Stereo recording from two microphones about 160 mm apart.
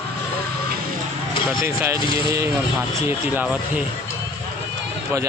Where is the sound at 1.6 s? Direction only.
15° right (ahead or behind).